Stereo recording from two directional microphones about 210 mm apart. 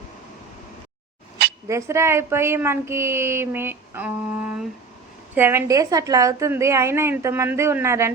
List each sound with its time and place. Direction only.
1.6 s speech: 15° right (ahead or behind)